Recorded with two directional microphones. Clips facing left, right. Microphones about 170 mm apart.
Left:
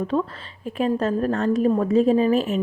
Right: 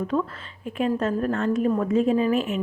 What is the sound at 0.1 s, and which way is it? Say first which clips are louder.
A woman's voice: left 2 dB; 30° left (ahead or behind).